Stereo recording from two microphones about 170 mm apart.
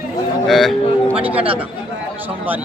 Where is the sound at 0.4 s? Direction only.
Centre (ahead or behind).